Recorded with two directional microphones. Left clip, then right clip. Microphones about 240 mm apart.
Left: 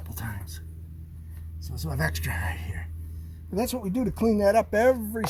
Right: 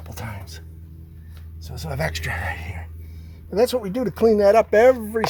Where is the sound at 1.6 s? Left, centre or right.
Right.